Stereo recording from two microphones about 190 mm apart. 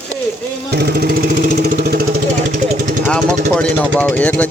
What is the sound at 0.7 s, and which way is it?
Vehicle, 55° right (ahead or behind).